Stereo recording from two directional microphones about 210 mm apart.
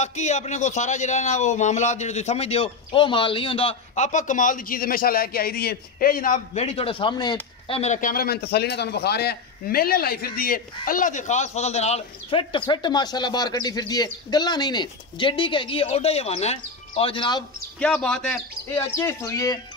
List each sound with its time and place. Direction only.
0.0 s a man's voice: 35° left (ahead or behind)
17.7 s speech: 5° left (ahead or behind)